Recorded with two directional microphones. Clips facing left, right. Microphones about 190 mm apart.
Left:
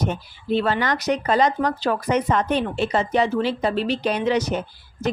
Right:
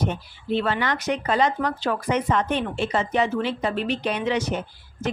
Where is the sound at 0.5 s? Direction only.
40° left (ahead or behind).